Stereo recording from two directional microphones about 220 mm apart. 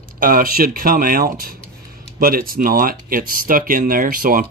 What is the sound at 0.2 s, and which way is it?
Speech, 40° right (ahead or behind).